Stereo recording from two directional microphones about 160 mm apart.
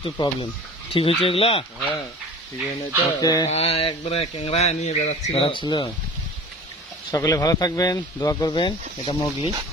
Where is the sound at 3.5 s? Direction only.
40° left (ahead or behind).